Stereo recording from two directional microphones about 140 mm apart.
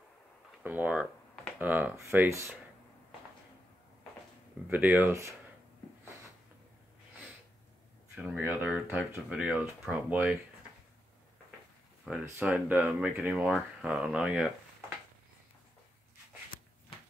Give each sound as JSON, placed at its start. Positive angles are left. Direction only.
{"t": 0.7, "sound": "speech", "side_deg": -10}
{"t": 4.6, "sound": "speech", "side_deg": -10}
{"t": 8.2, "sound": "speech", "side_deg": -10}
{"t": 12.1, "sound": "speech", "side_deg": -10}